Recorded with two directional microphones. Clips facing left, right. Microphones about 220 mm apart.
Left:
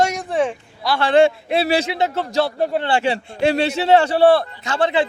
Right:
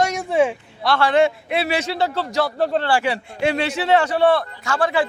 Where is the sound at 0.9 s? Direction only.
25° left (ahead or behind).